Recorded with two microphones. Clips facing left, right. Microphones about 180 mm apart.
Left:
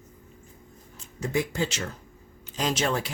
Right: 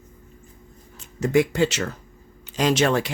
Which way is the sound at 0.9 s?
75° right (ahead or behind).